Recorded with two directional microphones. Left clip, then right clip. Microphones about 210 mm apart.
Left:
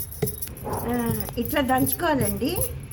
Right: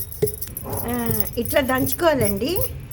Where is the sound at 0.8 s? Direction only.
50° right (ahead or behind).